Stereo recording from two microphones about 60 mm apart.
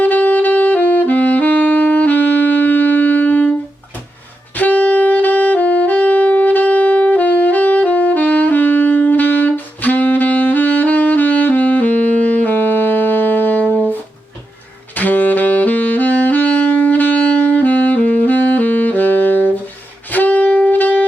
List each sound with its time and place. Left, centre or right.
0.0 s saxophone: left
4.5 s saxophone: left
14.9 s saxophone: left
20.1 s music: left